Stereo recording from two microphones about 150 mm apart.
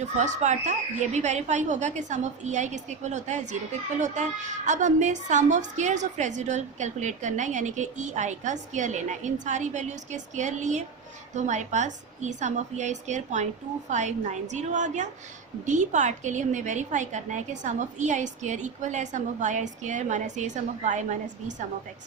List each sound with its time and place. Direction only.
0.0 s a woman's voice: 50° right (ahead or behind)